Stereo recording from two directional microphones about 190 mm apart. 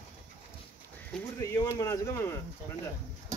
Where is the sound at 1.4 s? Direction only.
15° left (ahead or behind).